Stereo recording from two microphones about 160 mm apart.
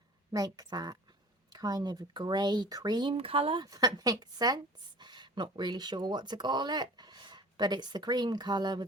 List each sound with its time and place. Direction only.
0.3 s speech: 20° right (ahead or behind)